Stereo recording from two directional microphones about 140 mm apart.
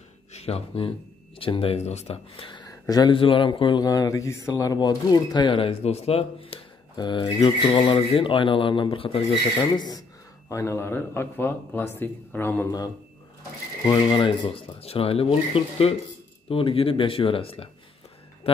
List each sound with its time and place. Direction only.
0.3 s a man's voice: 50° left (ahead or behind)
7.0 s speech: 30° left (ahead or behind)
9.6 s a man's voice: 30° left (ahead or behind)
13.8 s speech: 35° left (ahead or behind)